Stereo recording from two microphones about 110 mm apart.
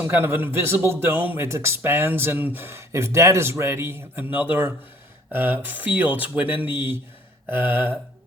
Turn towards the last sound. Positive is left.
turn(degrees=-20)  # may be behind; listen again after turning